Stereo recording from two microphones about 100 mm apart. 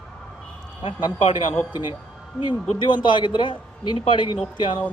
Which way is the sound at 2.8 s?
50° left (ahead or behind).